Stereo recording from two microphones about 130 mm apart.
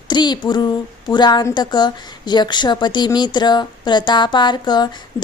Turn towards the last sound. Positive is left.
turn(degrees=35)  # may be behind; listen again after turning